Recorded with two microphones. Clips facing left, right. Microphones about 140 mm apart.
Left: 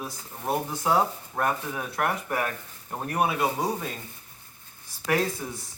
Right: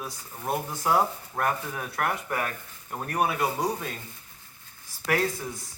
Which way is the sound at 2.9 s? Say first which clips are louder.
Left 1 dB; 20° left (ahead or behind).